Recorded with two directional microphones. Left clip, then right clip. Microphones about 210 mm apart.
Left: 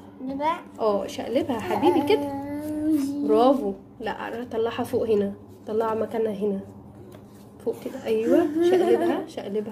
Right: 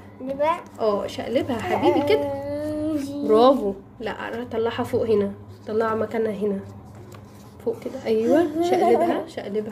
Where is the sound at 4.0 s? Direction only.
Centre (ahead or behind).